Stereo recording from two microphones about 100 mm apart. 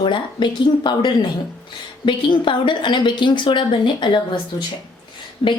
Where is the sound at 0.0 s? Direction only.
50° left (ahead or behind).